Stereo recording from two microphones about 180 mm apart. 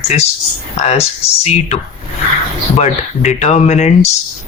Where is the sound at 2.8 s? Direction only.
40° left (ahead or behind).